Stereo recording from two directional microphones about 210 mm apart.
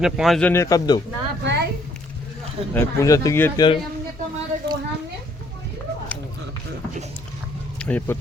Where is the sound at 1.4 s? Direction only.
55° right (ahead or behind).